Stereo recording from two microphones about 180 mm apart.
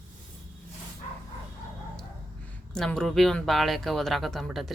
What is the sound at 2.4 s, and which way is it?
Speech, 5° left (ahead or behind).